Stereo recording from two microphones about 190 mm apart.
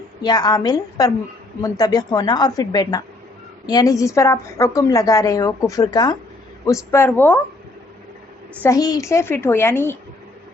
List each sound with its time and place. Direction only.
0.2 s a woman's voice: 20° left (ahead or behind)
8.6 s a woman's voice: 20° left (ahead or behind)